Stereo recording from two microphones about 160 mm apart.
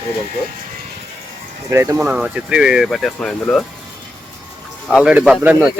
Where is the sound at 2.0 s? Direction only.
5° right (ahead or behind).